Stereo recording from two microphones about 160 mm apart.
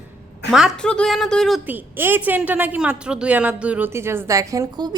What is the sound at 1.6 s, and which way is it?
A woman's voice, 10° right (ahead or behind).